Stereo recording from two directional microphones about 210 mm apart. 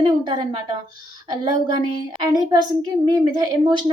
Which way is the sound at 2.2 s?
20° right (ahead or behind).